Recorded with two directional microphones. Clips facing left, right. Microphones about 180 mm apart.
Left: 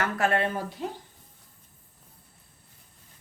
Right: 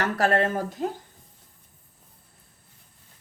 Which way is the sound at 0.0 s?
35° right (ahead or behind).